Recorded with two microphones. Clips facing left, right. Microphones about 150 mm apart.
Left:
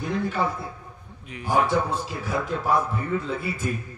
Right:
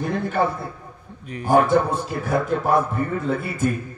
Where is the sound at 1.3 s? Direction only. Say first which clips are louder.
Right 6 dB; 50° right (ahead or behind).